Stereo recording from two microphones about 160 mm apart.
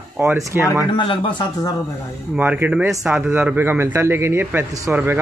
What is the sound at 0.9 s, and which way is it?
Speech, 30° left (ahead or behind).